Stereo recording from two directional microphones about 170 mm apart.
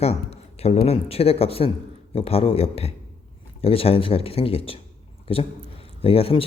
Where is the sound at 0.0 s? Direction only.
40° left (ahead or behind).